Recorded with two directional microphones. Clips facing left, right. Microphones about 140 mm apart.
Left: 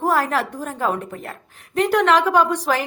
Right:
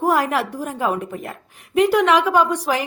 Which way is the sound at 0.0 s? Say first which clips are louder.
Right 1 dB; 15° right (ahead or behind).